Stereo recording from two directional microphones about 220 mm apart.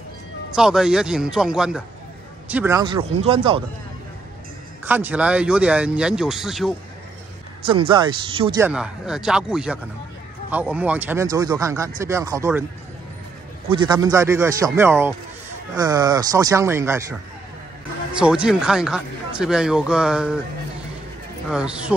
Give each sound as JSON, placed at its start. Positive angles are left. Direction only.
{"t": 0.6, "sound": "a man's voice", "side_deg": 0}
{"t": 2.8, "sound": "speech", "side_deg": -20}
{"t": 4.8, "sound": "speech", "side_deg": -10}
{"t": 7.6, "sound": "speech", "side_deg": -25}
{"t": 8.5, "sound": "speech", "side_deg": -5}
{"t": 13.7, "sound": "speech", "side_deg": -20}
{"t": 18.2, "sound": "speech", "side_deg": -5}
{"t": 21.5, "sound": "speech", "side_deg": -5}